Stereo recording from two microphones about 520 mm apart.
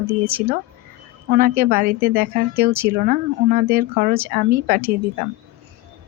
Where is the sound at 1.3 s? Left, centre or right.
Centre.